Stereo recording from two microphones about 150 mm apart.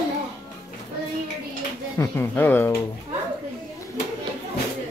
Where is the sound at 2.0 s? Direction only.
15° left (ahead or behind).